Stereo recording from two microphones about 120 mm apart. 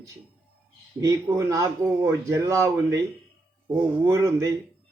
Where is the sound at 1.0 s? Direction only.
25° right (ahead or behind).